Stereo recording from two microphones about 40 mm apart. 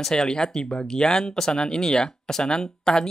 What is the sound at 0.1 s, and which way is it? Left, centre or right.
Speech, centre.